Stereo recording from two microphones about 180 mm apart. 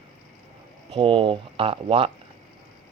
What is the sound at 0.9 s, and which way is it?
Speech, 30° right (ahead or behind).